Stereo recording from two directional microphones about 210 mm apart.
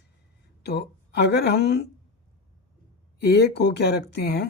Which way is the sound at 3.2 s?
50° left (ahead or behind).